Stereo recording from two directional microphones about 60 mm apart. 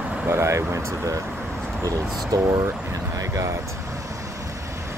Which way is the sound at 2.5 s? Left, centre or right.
Right.